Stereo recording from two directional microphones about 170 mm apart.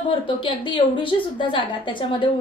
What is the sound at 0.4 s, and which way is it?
A woman's voice, 30° left (ahead or behind).